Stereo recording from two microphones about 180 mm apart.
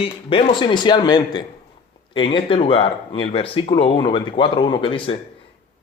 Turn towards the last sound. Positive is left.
turn(degrees=30)  # may be behind; listen again after turning